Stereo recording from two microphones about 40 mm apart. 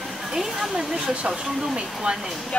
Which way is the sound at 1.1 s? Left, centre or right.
Right.